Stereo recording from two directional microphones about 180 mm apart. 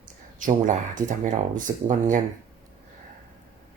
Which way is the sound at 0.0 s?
45° right (ahead or behind).